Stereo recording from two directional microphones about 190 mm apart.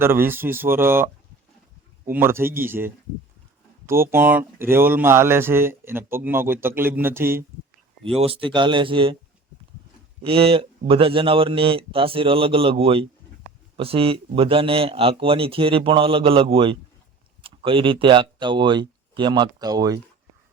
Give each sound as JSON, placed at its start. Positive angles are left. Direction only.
{"t": 0.0, "sound": "a man's voice", "side_deg": -10}
{"t": 8.2, "sound": "a man's voice", "side_deg": -30}
{"t": 10.2, "sound": "a man's voice", "side_deg": -30}